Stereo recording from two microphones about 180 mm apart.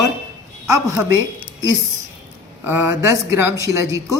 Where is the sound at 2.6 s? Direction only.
10° right (ahead or behind).